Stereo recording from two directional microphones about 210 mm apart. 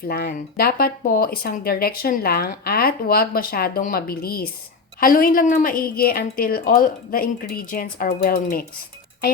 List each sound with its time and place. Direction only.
0.1 s speech: 45° left (ahead or behind)